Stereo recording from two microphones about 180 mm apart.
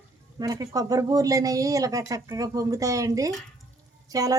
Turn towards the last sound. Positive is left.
turn(degrees=-20)  # may be behind; listen again after turning